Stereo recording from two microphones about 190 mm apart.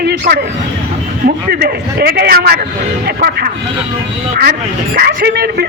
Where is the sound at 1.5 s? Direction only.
55° right (ahead or behind).